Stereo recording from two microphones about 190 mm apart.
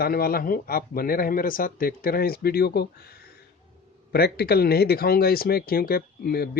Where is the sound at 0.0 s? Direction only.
50° left (ahead or behind).